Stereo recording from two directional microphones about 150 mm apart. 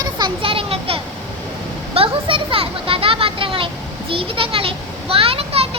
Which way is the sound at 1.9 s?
35° right (ahead or behind).